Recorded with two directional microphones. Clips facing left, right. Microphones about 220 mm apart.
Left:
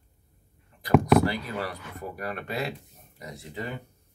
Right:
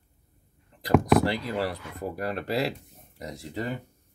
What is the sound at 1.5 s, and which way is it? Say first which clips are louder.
Speech: right 4 dB; 35° right (ahead or behind).